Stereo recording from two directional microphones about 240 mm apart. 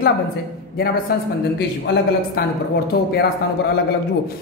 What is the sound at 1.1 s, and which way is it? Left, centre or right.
Speech, left.